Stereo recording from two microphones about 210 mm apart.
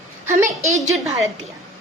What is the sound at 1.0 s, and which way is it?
Speech, 15° right (ahead or behind).